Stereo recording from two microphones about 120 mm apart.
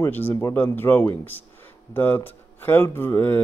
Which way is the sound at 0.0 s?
20° left (ahead or behind).